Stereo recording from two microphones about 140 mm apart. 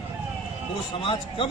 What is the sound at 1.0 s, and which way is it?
Speech, 35° left (ahead or behind).